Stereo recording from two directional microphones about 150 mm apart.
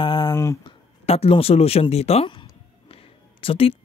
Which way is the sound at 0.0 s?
30° left (ahead or behind).